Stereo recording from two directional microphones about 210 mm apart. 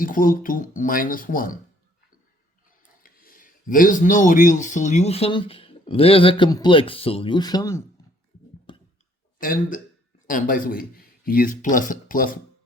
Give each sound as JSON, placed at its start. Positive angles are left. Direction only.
{"t": 0.0, "sound": "speech", "side_deg": 40}
{"t": 3.0, "sound": "speech", "side_deg": 45}
{"t": 8.7, "sound": "a sound", "side_deg": 25}
{"t": 9.4, "sound": "speech", "side_deg": 40}